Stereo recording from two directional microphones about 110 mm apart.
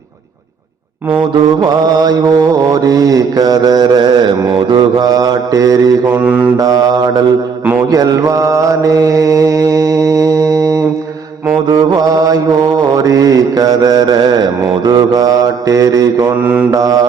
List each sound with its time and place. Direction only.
1.3 s mantra: 50° right (ahead or behind)
1.8 s mantra: 35° right (ahead or behind)
6.1 s mantra: 15° right (ahead or behind)
6.6 s mantra: 35° right (ahead or behind)